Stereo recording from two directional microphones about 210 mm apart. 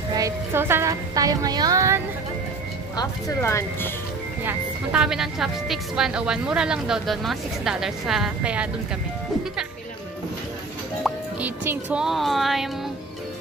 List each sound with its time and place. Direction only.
0.1 s a woman's voice: 15° right (ahead or behind)
3.0 s speech: 15° left (ahead or behind)
4.5 s speech: 5° right (ahead or behind)
11.1 s speech: 5° right (ahead or behind)